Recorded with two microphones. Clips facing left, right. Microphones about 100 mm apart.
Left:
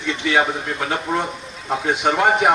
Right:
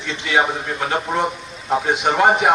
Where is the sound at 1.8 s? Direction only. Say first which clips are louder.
Right 1 dB; 20° right (ahead or behind).